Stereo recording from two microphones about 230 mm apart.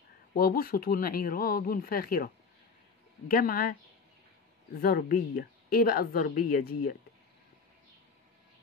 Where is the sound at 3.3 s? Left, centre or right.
Left.